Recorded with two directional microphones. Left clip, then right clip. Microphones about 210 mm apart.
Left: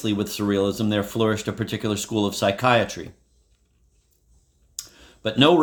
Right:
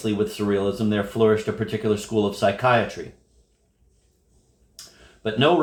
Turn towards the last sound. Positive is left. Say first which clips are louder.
# left 3 dB
turn(degrees=55)  # may be behind; listen again after turning